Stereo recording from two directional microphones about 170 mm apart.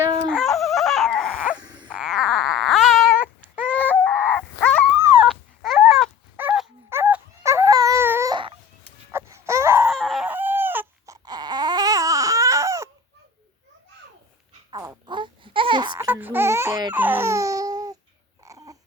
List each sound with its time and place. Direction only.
0.3 s dog: 5° left (ahead or behind)
1.9 s a sound: 5° right (ahead or behind)
3.7 s chicken: 10° left (ahead or behind)
5.2 s dog: centre (ahead or behind)
6.3 s dog: 10° right (ahead or behind)
6.9 s baby cry: 15° right (ahead or behind)
8.3 s baby cry: 30° right (ahead or behind)
9.1 s baby cry: 15° right (ahead or behind)
9.9 s baby cry: centre (ahead or behind); by 12.9 s 15° right (ahead or behind)
14.7 s babbling: 25° right (ahead or behind)
16.0 s baby cry: 10° right (ahead or behind)
16.9 s a sound: 10° right (ahead or behind)
18.4 s babbling: 20° right (ahead or behind)